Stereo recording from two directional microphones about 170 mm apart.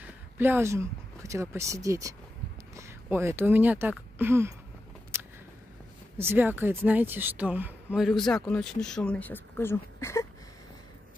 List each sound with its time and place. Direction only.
0.0 s speech: 10° right (ahead or behind)
4.2 s a sound: 15° right (ahead or behind)
6.1 s a woman's voice: 10° right (ahead or behind); by 10.2 s 15° left (ahead or behind)